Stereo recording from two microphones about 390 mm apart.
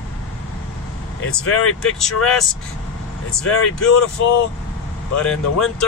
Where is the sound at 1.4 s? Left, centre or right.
Left.